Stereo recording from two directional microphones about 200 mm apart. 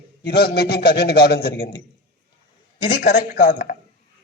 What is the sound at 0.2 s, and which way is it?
A man's voice, 50° left (ahead or behind).